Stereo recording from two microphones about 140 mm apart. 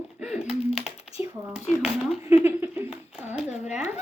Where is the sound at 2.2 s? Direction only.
15° right (ahead or behind).